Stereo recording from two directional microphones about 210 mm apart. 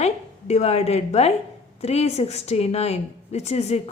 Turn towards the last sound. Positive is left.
turn(degrees=30)  # may be behind; listen again after turning